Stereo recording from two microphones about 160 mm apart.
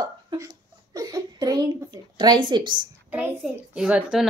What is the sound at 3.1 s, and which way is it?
A child's voice, 5° right (ahead or behind).